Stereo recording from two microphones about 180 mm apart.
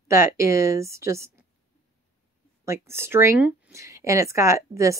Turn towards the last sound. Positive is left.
turn(degrees=-15)  # may be behind; listen again after turning